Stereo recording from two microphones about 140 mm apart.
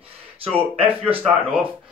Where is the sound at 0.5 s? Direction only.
10° right (ahead or behind).